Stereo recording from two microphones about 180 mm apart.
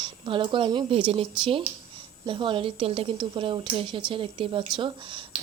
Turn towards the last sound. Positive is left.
turn(degrees=-30)  # may be behind; listen again after turning